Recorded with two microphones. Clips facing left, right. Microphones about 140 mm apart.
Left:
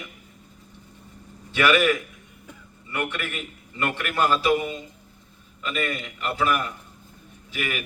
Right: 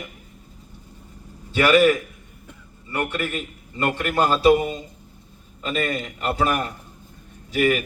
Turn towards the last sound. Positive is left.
turn(degrees=-45)  # may be behind; listen again after turning